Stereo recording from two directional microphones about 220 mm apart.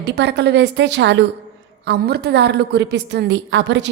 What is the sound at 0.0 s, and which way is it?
A woman's voice, 50° right (ahead or behind).